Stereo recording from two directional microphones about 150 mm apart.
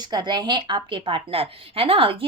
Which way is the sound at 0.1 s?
30° right (ahead or behind).